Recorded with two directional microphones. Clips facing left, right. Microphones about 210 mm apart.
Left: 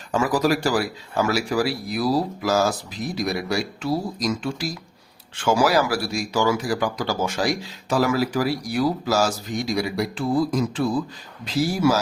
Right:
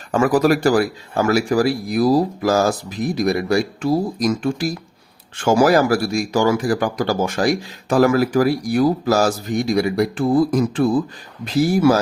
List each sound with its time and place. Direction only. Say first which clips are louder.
0.1 s speech: right 5 dB; 55° right (ahead or behind)